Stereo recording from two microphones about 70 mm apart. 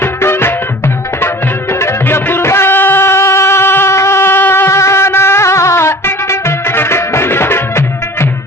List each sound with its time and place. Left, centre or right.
0.0 s music: left
1.8 s music: left